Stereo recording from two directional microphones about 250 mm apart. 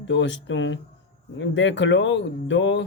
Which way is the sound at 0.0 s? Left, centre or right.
Left.